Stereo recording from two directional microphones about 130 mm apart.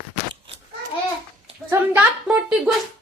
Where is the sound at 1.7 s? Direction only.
20° right (ahead or behind).